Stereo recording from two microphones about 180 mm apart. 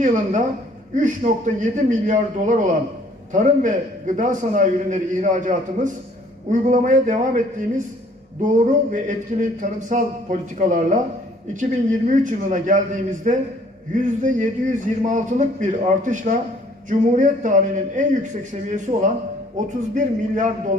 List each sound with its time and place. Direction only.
0.0 s a man's voice: 45° right (ahead or behind)
8.6 s a man's voice: 45° right (ahead or behind)